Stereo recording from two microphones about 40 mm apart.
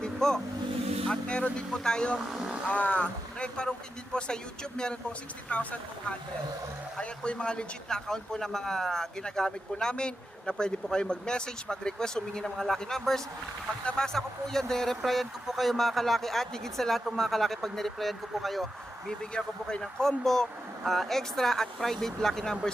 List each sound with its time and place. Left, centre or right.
0.0 s vehicle: centre
1.1 s speech: left
1.7 s speech: centre
2.6 s speech: left
5.5 s speech: left; by 18.6 s centre
19.3 s speech: left
19.8 s speech: centre